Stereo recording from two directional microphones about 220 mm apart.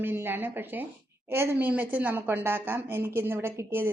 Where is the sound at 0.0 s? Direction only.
10° right (ahead or behind).